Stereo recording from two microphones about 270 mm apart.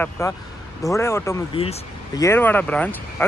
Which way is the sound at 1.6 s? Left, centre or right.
Left.